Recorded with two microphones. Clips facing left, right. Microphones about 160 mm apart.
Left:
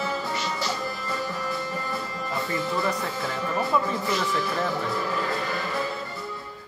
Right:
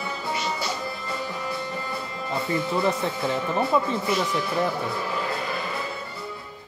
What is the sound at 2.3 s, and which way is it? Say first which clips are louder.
Speech: right 3 dB; 20° right (ahead or behind).